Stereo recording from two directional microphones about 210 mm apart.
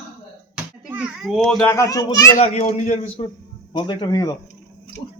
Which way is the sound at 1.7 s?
15° left (ahead or behind).